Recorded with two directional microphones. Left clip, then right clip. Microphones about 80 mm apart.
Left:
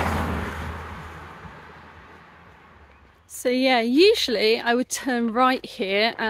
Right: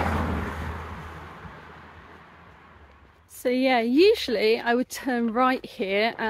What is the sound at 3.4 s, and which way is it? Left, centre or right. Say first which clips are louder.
Speech: left 2 dB; left.